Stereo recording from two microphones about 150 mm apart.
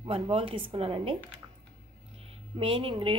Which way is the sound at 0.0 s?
40° right (ahead or behind).